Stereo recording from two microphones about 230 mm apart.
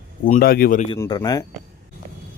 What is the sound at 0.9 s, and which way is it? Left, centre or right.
Speech, centre.